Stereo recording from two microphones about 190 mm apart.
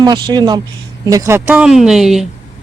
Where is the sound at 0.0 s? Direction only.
20° right (ahead or behind).